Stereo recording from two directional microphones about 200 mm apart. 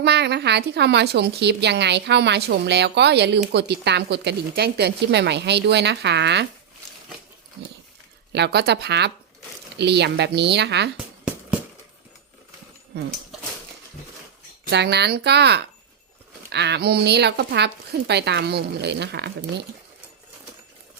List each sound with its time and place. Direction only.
0.0 s a woman's voice: 60° right (ahead or behind)
8.3 s a woman's voice: 55° right (ahead or behind)
10.9 s music: 5° right (ahead or behind)
14.7 s a woman's voice: 55° right (ahead or behind)